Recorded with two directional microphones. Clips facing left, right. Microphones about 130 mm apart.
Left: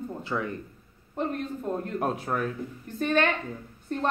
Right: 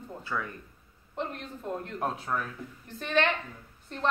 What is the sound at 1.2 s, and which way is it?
A man's voice, 45° left (ahead or behind).